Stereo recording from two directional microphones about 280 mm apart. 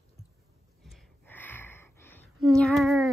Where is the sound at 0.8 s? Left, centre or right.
Centre.